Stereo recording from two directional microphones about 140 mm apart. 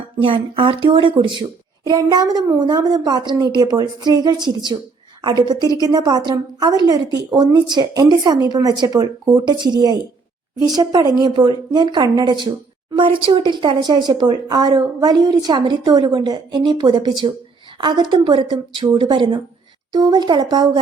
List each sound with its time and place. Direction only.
0.2 s a woman's voice: 40° right (ahead or behind)